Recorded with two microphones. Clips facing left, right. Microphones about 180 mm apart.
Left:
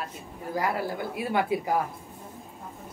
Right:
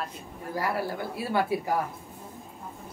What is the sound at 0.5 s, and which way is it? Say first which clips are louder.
Speech: left 1 dB; 20° left (ahead or behind).